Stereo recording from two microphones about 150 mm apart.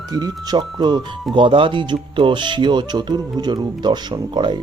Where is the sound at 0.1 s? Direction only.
30° right (ahead or behind).